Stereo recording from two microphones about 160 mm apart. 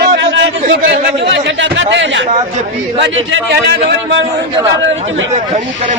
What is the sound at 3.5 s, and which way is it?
Speech, 90° right.